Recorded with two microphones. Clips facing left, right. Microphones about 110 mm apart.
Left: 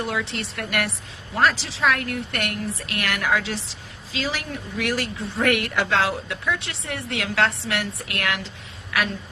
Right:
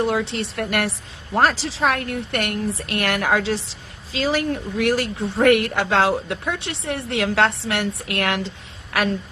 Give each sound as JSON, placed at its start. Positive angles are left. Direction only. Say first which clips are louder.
{"t": 0.0, "sound": "speech", "louder": "right 6 dB", "side_deg": -30}